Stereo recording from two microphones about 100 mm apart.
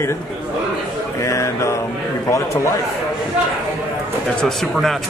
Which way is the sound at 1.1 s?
30° left (ahead or behind).